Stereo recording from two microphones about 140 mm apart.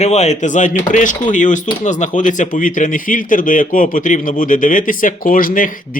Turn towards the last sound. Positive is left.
turn(degrees=80)